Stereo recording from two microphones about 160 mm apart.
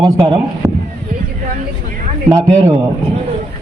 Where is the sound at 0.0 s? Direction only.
30° right (ahead or behind).